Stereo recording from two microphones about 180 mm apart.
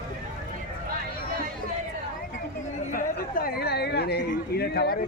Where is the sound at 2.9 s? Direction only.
55° left (ahead or behind).